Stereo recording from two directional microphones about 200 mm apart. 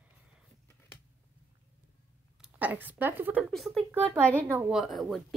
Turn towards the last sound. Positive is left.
turn(degrees=0)  # may be behind; listen again after turning